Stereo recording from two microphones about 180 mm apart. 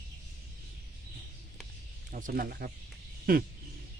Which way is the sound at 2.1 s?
45° right (ahead or behind).